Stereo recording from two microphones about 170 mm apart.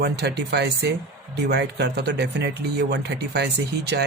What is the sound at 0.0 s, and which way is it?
Speech, 75° right (ahead or behind).